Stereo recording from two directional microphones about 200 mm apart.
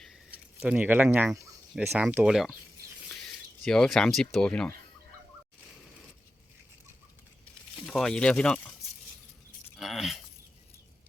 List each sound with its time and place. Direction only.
0.6 s speech: 5° right (ahead or behind)
7.8 s speech: 5° left (ahead or behind)
9.7 s a sound: centre (ahead or behind)